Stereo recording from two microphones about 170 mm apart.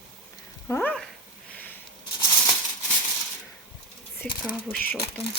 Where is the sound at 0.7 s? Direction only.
10° left (ahead or behind).